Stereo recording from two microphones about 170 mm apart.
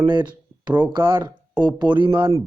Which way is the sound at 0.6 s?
5° right (ahead or behind).